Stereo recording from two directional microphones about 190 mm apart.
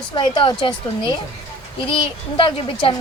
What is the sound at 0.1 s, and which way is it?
A woman's voice, 25° left (ahead or behind).